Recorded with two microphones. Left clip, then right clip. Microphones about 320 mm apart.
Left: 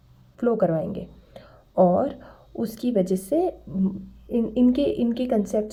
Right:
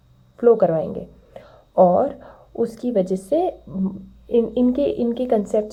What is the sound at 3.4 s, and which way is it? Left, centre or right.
A child's voice, centre.